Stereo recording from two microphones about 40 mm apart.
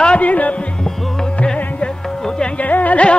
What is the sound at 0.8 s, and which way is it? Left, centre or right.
Music, centre.